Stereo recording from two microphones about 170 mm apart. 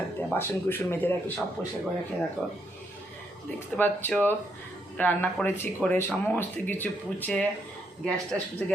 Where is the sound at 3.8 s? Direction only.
10° left (ahead or behind).